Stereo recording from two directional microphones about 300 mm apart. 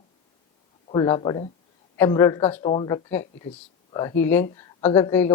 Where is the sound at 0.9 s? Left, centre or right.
Centre.